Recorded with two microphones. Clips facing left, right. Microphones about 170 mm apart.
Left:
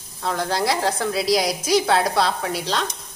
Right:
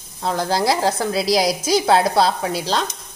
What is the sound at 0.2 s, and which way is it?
A woman's voice, 30° right (ahead or behind).